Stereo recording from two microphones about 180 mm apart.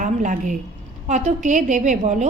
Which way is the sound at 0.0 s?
45° right (ahead or behind).